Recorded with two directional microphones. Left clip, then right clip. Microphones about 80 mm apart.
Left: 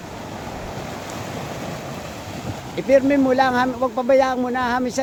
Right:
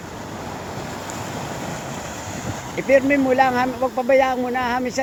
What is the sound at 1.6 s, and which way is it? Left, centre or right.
Train, centre.